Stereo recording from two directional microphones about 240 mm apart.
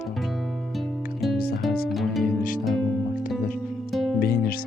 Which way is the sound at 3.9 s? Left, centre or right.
Centre.